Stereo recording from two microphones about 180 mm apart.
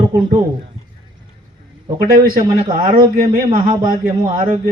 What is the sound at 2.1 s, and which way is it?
A man's voice, 50° right (ahead or behind).